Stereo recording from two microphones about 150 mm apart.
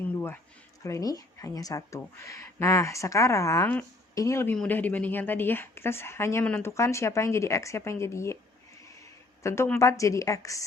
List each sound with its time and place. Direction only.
0.9 s speech: 20° left (ahead or behind)
4.5 s speech: 10° left (ahead or behind)
9.4 s a woman's voice: 20° left (ahead or behind)